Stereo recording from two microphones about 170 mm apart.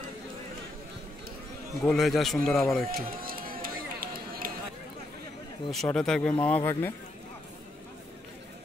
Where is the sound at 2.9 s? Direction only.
55° right (ahead or behind).